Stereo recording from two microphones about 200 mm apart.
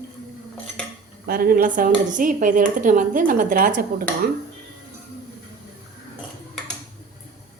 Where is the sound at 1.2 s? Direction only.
45° right (ahead or behind).